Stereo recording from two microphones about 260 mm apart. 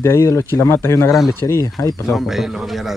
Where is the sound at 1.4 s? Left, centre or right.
Centre.